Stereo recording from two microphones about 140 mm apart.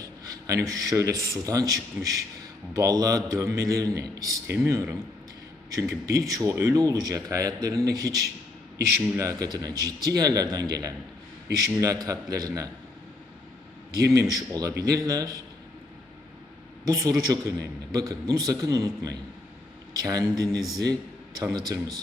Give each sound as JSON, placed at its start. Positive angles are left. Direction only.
{"t": 0.0, "sound": "speech", "side_deg": -25}
{"t": 14.0, "sound": "speech", "side_deg": -25}
{"t": 16.8, "sound": "speech", "side_deg": -25}